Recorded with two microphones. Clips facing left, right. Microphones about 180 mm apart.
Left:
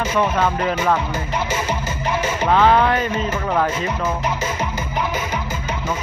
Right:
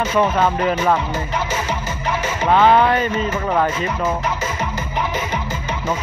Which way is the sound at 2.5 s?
5° right (ahead or behind).